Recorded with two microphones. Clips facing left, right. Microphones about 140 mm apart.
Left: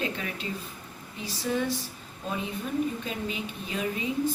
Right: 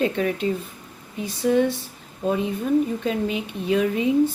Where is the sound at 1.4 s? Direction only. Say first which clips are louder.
Right 9 dB; 65° right (ahead or behind).